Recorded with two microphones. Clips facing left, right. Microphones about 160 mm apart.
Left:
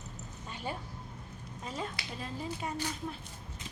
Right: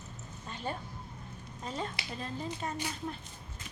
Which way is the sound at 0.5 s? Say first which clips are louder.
Right 1 dB; 10° left (ahead or behind).